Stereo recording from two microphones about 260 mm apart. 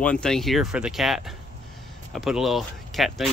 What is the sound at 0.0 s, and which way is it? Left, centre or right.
Speech, centre.